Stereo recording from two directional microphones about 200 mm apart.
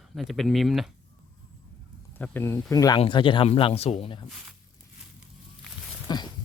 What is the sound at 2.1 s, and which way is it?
Speech, 10° left (ahead or behind).